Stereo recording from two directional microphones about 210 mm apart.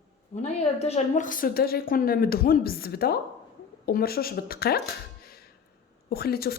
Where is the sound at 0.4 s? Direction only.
30° left (ahead or behind); by 4.8 s 45° left (ahead or behind).